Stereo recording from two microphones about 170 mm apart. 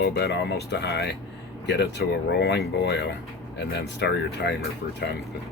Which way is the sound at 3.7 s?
85° left.